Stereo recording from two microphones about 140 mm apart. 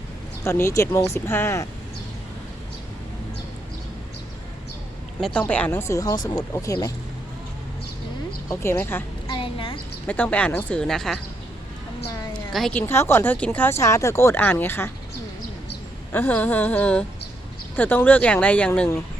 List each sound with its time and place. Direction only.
0.4 s speech: 20° left (ahead or behind)
5.5 s speech: 10° left (ahead or behind)
5.9 s speech: 25° left (ahead or behind)
8.4 s speech: 15° left (ahead or behind)
9.3 s a sound: 40° left (ahead or behind)
10.1 s speech: 10° left (ahead or behind)
12.7 s speech: 15° left (ahead or behind)
16.1 s speech: 15° left (ahead or behind)